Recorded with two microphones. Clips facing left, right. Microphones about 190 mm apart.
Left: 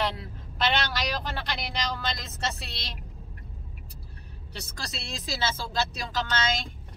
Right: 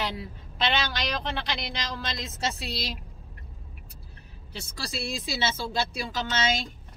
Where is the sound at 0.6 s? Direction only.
Centre (ahead or behind).